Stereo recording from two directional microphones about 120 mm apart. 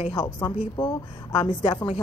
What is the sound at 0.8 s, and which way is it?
Speech, 45° left (ahead or behind).